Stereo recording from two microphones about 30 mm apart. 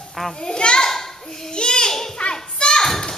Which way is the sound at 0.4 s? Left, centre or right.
Left.